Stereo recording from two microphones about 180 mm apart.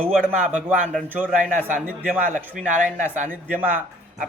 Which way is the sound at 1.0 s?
10° right (ahead or behind).